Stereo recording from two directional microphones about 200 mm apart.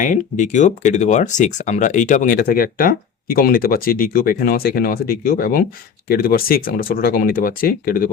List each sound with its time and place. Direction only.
0.0 s speech: 40° left (ahead or behind)